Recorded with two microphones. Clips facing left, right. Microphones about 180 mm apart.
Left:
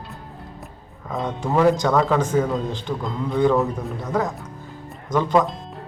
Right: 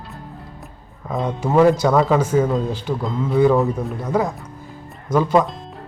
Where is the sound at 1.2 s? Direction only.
5° right (ahead or behind).